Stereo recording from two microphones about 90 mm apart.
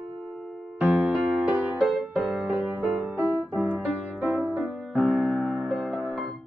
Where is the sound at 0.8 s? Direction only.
10° right (ahead or behind).